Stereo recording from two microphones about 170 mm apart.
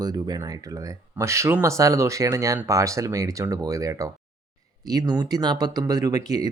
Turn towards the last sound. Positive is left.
turn(degrees=-20)  # may be behind; listen again after turning